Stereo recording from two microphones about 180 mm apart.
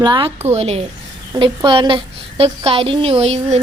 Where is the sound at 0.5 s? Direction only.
35° right (ahead or behind).